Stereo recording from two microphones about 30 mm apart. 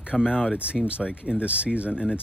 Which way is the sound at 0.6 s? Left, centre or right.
Right.